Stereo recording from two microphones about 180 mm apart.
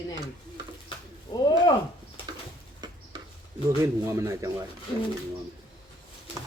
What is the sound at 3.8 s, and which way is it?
Speech, 15° right (ahead or behind).